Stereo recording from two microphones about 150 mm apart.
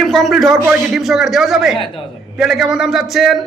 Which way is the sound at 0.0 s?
Centre (ahead or behind).